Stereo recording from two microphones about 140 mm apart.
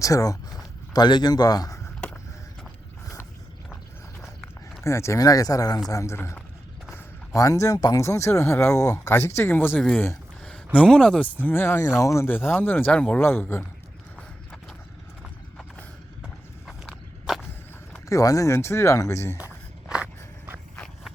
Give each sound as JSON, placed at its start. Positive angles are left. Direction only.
{"t": 0.0, "sound": "a man's voice", "side_deg": 25}
{"t": 4.8, "sound": "a man's voice", "side_deg": 20}
{"t": 14.2, "sound": "horse", "side_deg": 5}
{"t": 16.2, "sound": "walk", "side_deg": 0}
{"t": 18.1, "sound": "speech", "side_deg": 25}